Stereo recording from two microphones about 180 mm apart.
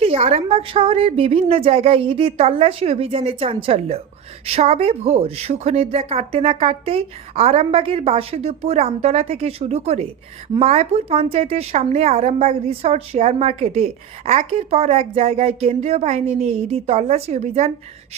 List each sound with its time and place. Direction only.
0.0 s a woman's voice: 35° right (ahead or behind)